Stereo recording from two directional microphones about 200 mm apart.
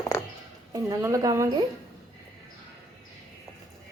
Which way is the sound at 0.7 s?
15° right (ahead or behind).